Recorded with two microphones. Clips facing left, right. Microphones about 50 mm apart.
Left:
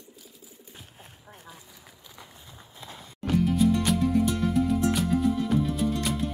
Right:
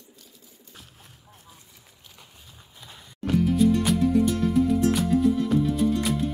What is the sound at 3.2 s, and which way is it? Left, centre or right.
Music, centre.